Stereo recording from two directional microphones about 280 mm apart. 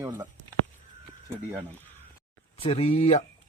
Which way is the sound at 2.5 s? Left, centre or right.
Left.